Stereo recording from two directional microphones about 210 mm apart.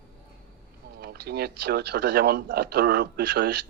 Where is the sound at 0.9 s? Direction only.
50° right (ahead or behind).